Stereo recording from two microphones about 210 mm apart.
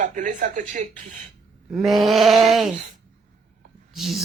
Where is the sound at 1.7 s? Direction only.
Centre (ahead or behind).